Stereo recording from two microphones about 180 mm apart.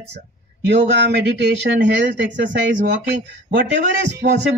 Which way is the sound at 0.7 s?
70° right (ahead or behind).